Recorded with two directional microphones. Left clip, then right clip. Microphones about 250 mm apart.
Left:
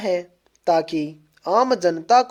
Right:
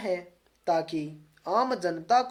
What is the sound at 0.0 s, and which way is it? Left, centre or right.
Speech, left.